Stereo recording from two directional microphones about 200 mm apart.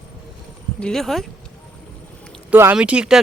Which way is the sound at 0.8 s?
Centre (ahead or behind).